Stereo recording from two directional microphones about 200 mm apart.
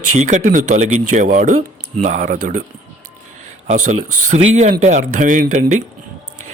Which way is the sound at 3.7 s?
35° right (ahead or behind).